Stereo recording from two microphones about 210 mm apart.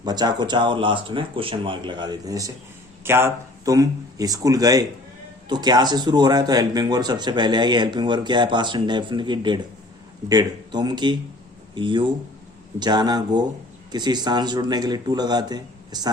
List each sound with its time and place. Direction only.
0.0 s speech: 20° right (ahead or behind)